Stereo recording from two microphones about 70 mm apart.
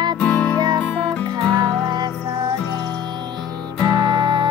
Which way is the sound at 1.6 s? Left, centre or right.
Right.